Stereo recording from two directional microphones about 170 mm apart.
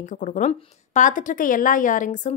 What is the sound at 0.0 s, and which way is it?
A woman's voice, 50° left (ahead or behind).